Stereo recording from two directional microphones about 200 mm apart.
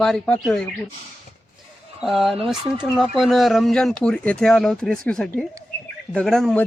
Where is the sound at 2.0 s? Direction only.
Centre (ahead or behind).